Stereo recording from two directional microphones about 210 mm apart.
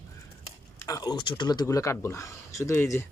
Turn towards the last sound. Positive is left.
turn(degrees=10)  # may be behind; listen again after turning